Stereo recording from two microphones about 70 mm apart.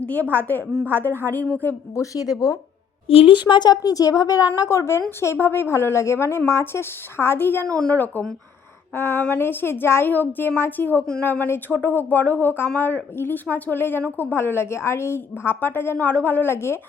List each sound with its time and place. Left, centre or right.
0.0 s a woman's voice: left
2.0 s speech: left
3.4 s a woman's voice: left
9.0 s a woman's voice: left